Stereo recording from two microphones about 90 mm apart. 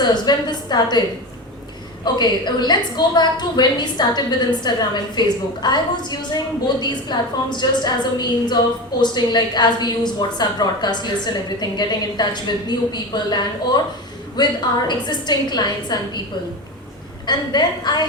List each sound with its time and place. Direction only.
0.0 s a woman's voice: 50° left (ahead or behind)
2.1 s a woman's voice: 55° left (ahead or behind)
17.2 s a woman's voice: 50° left (ahead or behind)